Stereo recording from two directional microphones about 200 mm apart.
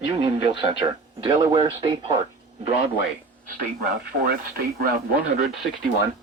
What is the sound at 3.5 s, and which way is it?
Speech, 45° right (ahead or behind).